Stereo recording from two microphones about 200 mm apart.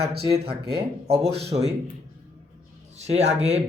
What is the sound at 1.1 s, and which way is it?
Speech, 30° right (ahead or behind).